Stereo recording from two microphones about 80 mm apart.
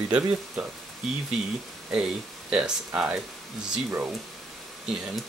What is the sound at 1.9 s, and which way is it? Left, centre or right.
Speech, centre.